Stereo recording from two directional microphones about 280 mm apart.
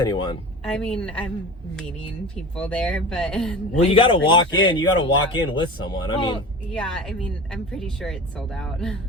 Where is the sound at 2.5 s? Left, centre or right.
Centre.